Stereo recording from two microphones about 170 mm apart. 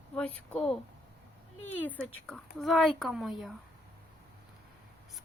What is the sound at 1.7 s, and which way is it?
Speech, 10° left (ahead or behind).